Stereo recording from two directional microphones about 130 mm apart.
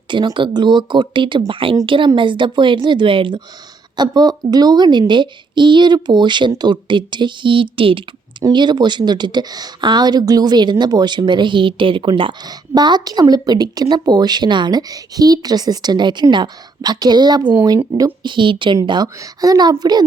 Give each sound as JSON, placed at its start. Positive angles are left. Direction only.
{"t": 0.1, "sound": "a woman's voice", "side_deg": -35}